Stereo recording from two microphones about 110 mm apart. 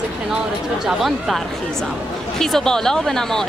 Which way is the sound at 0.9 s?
Centre (ahead or behind).